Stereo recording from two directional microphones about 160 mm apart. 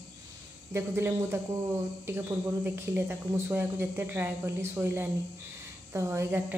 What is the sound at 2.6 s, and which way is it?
A woman's voice, 15° right (ahead or behind).